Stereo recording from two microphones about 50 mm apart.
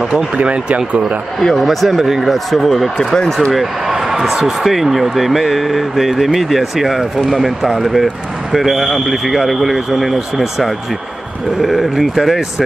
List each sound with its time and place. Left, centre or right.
0.4 s speech: right
1.4 s speech: centre
3.5 s speech: centre